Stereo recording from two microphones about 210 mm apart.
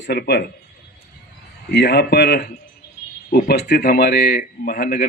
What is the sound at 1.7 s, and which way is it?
Speech, 55° left (ahead or behind).